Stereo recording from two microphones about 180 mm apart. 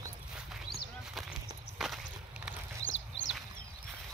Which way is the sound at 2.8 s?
90° left.